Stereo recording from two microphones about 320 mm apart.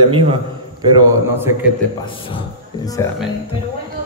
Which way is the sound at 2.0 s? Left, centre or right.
Centre.